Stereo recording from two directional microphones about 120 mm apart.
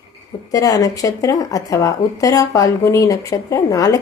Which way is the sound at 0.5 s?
30° left (ahead or behind).